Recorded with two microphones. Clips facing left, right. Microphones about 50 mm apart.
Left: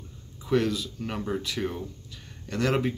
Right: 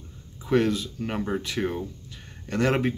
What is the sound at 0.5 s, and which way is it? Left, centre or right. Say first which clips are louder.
Speech: right 2 dB; right.